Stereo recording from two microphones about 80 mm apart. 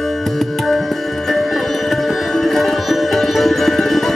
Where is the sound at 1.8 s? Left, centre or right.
Centre.